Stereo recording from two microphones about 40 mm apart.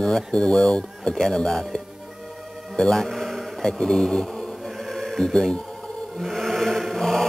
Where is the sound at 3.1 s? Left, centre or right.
Centre.